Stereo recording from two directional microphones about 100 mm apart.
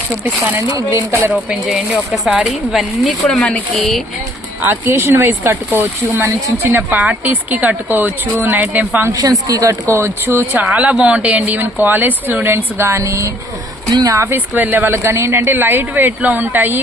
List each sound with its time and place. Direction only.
0.8 s speech: 25° right (ahead or behind)
1.3 s speech: 5° right (ahead or behind)
3.2 s speech: 10° left (ahead or behind)
4.6 s speech: 25° right (ahead or behind)
9.1 s speech: 35° right (ahead or behind); by 16.8 s 20° right (ahead or behind)